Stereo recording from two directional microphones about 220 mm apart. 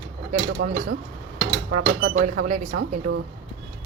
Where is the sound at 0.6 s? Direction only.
45° right (ahead or behind).